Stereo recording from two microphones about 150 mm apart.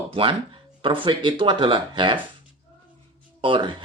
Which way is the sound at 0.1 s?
35° right (ahead or behind).